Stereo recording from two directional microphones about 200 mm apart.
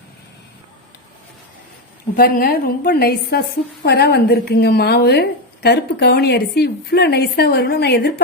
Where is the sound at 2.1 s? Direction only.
50° left (ahead or behind).